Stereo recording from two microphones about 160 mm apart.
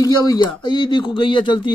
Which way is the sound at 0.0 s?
25° left (ahead or behind).